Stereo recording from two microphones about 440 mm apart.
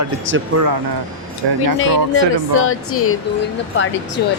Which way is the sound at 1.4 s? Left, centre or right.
Right.